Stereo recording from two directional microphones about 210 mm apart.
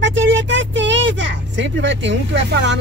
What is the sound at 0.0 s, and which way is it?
Vehicle, 60° right (ahead or behind).